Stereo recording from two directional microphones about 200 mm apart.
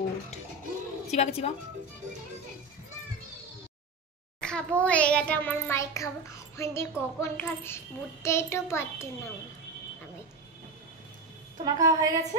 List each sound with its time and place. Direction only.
1.1 s a woman's voice: 30° left (ahead or behind)
4.4 s a child's voice: 5° left (ahead or behind)
11.6 s a woman's voice: 15° right (ahead or behind)